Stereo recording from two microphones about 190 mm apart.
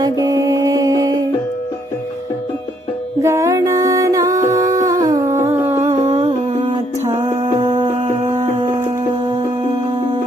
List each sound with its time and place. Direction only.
0.0 s music: 20° right (ahead or behind)
3.2 s music: 15° right (ahead or behind)
5.9 s humming: 35° right (ahead or behind)
7.3 s music: 40° right (ahead or behind)
7.7 s a sound: 25° right (ahead or behind)
8.0 s a sound: 35° right (ahead or behind)
9.1 s music: 25° right (ahead or behind)